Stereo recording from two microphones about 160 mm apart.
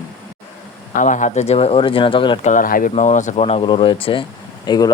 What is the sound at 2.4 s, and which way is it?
Speech, 55° left (ahead or behind).